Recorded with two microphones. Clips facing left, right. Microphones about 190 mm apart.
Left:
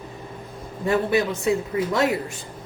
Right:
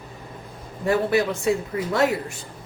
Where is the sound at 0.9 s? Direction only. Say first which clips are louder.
Even; 20° left (ahead or behind).